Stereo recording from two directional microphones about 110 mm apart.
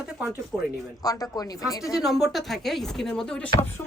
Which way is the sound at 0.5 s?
Centre (ahead or behind).